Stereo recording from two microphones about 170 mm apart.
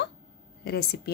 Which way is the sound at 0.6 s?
70° left (ahead or behind).